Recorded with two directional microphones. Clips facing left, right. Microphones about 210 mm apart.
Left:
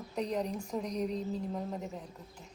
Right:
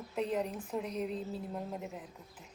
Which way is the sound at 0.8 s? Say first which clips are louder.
Left 2 dB; 40° left (ahead or behind).